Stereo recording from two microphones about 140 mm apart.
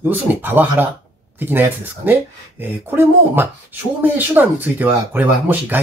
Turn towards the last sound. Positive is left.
turn(degrees=-10)  # may be behind; listen again after turning